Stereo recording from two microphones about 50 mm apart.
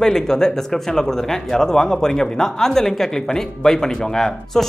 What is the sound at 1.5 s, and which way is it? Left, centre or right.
Speech, centre.